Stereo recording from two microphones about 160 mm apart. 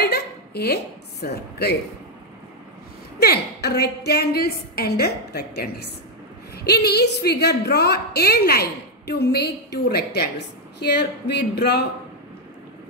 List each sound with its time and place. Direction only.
0.0 s a sound: 85° left
1.2 s a woman's voice: 85° left
3.2 s a woman's voice: 85° left